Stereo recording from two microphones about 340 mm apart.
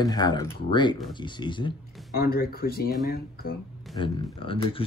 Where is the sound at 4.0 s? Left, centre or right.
Centre.